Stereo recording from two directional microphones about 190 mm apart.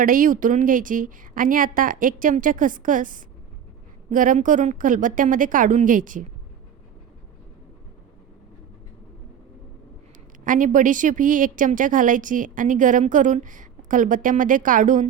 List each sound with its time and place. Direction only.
0.0 s a woman's voice: 45° right (ahead or behind)
10.4 s a woman's voice: 45° right (ahead or behind)